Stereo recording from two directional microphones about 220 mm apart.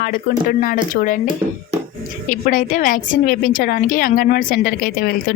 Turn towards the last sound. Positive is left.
turn(degrees=40)  # may be behind; listen again after turning